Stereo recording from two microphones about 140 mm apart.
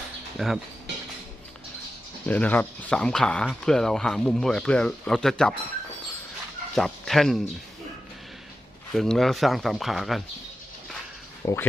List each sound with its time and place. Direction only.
0.3 s speech: centre (ahead or behind)
2.2 s speech: 10° left (ahead or behind)
6.7 s speech: centre (ahead or behind)
9.0 s speech: 5° left (ahead or behind)
11.4 s speech: 20° left (ahead or behind)